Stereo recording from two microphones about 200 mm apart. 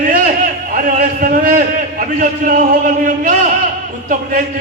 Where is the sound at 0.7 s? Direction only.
45° right (ahead or behind).